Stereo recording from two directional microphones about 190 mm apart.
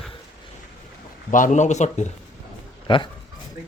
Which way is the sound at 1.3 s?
40° left (ahead or behind).